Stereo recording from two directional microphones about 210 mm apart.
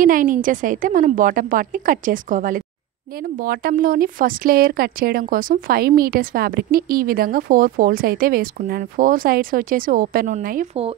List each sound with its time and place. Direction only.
0.0 s a woman's voice: 40° right (ahead or behind)